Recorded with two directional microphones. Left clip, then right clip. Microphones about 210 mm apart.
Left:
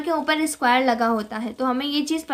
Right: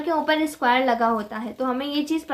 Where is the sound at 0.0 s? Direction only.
20° left (ahead or behind).